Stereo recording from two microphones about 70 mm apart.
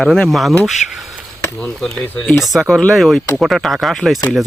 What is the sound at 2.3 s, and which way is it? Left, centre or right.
Speech, centre.